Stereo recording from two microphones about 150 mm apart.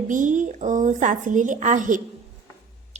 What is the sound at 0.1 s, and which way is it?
A woman's voice, 60° right (ahead or behind).